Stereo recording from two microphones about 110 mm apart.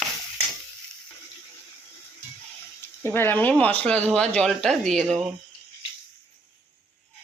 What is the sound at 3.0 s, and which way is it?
Speech, 20° left (ahead or behind).